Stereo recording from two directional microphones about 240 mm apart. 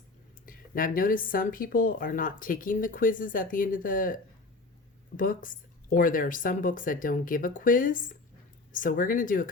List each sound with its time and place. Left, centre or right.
0.4 s speech: left